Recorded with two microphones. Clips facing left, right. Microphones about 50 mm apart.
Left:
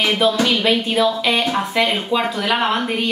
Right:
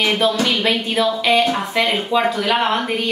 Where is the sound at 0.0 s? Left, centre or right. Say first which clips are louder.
Left 1 dB; centre.